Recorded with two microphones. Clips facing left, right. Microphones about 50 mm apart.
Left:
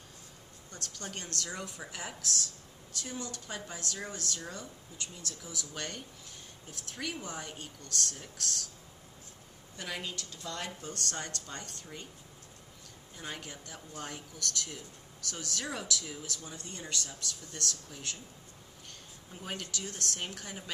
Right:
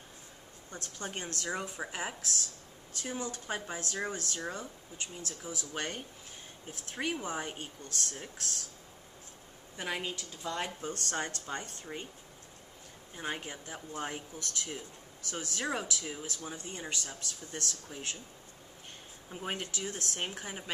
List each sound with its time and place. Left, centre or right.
0.7 s speech: right
9.8 s speech: centre
13.1 s speech: right
19.3 s speech: right